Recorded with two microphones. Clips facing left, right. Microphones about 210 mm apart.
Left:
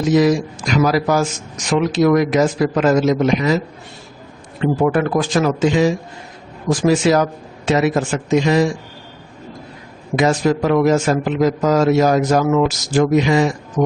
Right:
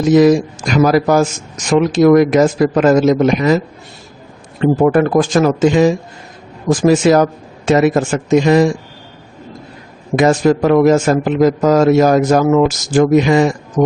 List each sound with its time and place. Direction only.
0.1 s a man's voice: 50° right (ahead or behind)
4.6 s a man's voice: 45° right (ahead or behind)
10.2 s a man's voice: 50° right (ahead or behind)
13.8 s speech: 40° right (ahead or behind)